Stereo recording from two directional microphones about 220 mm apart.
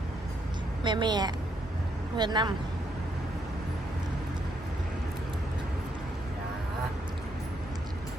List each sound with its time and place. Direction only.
0.9 s a woman's voice: 20° right (ahead or behind)